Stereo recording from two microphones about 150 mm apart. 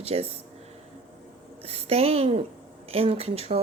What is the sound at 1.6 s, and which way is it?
A woman's voice, 40° right (ahead or behind).